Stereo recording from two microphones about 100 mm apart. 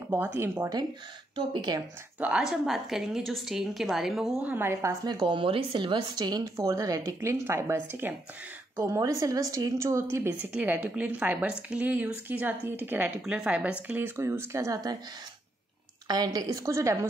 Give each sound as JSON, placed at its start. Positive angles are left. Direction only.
{"t": 0.3, "sound": "speech", "side_deg": -25}
{"t": 1.3, "sound": "speech", "side_deg": -45}
{"t": 2.1, "sound": "a woman's voice", "side_deg": -15}
{"t": 2.4, "sound": "a woman's voice", "side_deg": -5}
{"t": 4.4, "sound": "speech", "side_deg": -20}
{"t": 5.0, "sound": "speech", "side_deg": -45}
{"t": 10.4, "sound": "a woman's voice", "side_deg": -15}
{"t": 16.1, "sound": "speech", "side_deg": -40}